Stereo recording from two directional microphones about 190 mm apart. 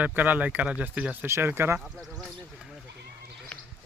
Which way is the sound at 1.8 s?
Centre (ahead or behind).